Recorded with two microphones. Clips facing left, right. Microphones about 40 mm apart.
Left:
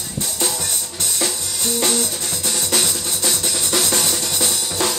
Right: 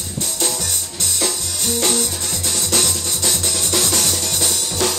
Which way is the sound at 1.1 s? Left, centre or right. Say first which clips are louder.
Right 1 dB; centre.